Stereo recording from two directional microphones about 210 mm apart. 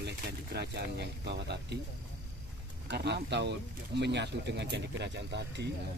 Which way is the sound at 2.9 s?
55° right (ahead or behind).